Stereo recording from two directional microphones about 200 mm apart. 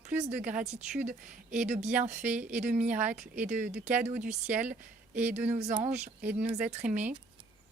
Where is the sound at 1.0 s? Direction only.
40° right (ahead or behind).